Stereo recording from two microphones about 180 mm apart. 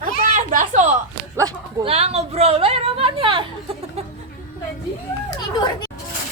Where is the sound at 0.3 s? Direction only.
45° right (ahead or behind).